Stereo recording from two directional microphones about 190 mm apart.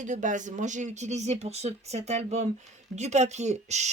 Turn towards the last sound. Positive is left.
turn(degrees=-35)  # may be behind; listen again after turning